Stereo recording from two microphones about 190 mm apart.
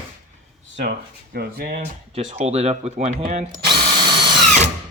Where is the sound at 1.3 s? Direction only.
55° right (ahead or behind).